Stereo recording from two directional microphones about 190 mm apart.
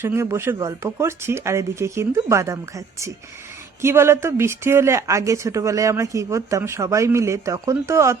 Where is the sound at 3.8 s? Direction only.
15° right (ahead or behind).